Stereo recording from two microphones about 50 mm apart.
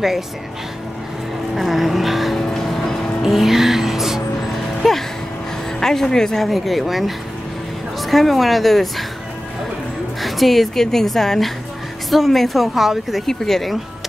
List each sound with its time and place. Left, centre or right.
1.5 s speech: centre
2.3 s music: centre
3.2 s music: centre
4.8 s music: centre
5.8 s speech: centre
10.2 s speech: centre